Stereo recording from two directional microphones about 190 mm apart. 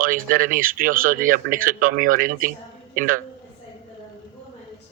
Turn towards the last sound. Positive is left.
turn(degrees=-45)  # may be behind; listen again after turning